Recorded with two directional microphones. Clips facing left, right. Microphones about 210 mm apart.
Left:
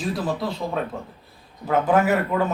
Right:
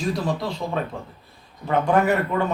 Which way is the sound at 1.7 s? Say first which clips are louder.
Even; 5° left (ahead or behind).